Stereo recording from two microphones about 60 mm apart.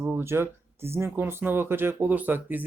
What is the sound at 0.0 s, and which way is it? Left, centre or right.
Speech, right.